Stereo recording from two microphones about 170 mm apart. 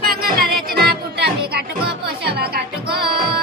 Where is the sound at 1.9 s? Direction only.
70° right (ahead or behind).